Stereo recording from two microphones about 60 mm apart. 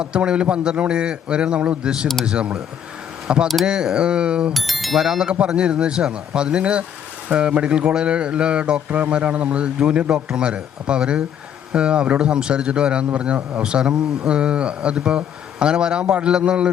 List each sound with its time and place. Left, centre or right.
0.0 s a man's voice: centre
4.5 s speech: centre
5.0 s a man's voice: centre